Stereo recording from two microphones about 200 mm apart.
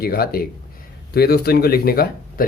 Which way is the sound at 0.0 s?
50° left (ahead or behind).